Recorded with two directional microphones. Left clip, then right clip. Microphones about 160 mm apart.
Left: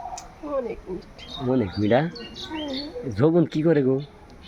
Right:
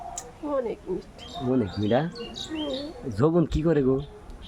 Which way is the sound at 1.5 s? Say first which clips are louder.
Left 3 dB; 10° left (ahead or behind).